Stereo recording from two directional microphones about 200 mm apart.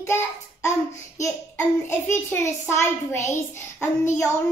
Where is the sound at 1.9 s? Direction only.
10° left (ahead or behind).